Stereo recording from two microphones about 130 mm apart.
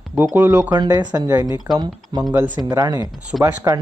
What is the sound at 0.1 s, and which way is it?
Speech, 15° right (ahead or behind).